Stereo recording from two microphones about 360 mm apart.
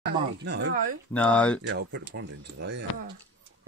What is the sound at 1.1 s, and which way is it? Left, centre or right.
Speech, centre.